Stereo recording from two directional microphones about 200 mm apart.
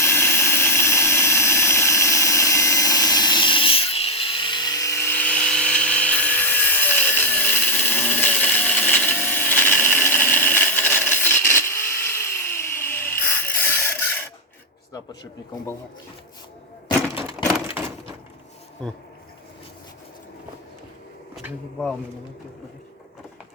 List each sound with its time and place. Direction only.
0.0 s a sound: 10° left (ahead or behind)
17.8 s wood: 10° right (ahead or behind)
18.8 s speech: 5° left (ahead or behind)
21.3 s speech: 5° left (ahead or behind)